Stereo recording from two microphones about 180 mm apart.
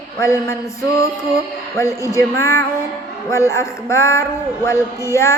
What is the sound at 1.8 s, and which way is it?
A woman's voice, 15° left (ahead or behind).